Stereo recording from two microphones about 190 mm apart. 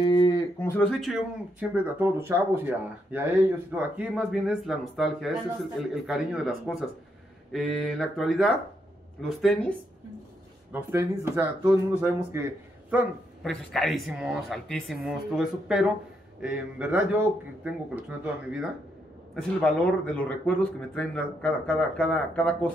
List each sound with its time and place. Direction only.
0.0 s a sound: 25° left (ahead or behind)
0.6 s speech: 10° left (ahead or behind)
1.6 s speech: 15° right (ahead or behind)
10.7 s speech: 15° right (ahead or behind)
12.9 s speech: centre (ahead or behind)
19.3 s speech: 5° left (ahead or behind)